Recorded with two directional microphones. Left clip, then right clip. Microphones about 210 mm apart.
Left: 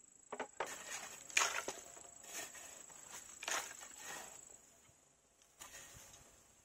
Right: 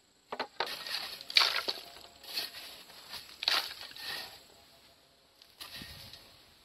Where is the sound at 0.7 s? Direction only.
5° right (ahead or behind).